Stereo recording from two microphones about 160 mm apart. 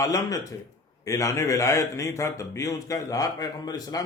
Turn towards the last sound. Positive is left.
turn(degrees=25)  # may be behind; listen again after turning